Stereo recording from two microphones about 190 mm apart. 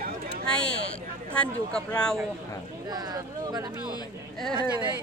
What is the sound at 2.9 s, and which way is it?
Speech, 20° right (ahead or behind).